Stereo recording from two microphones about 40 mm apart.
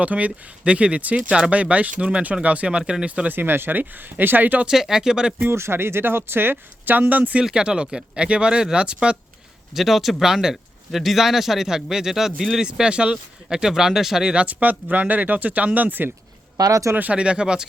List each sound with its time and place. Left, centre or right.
0.0 s speech: right
3.2 s speech: right
3.8 s speech: right
4.6 s speech: centre
5.5 s speech: right
7.1 s speech: right
7.5 s speech: right
9.7 s speech: centre
12.9 s speech: right
14.3 s speech: right
17.1 s speech: right